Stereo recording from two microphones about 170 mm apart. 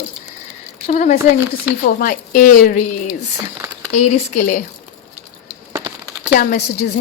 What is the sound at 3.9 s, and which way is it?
Speech, 40° left (ahead or behind).